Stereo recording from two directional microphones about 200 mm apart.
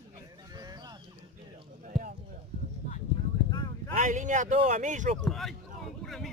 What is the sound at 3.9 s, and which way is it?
Speech, 40° right (ahead or behind).